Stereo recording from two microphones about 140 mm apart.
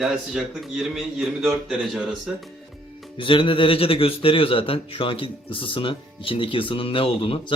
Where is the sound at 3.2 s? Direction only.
40° left (ahead or behind).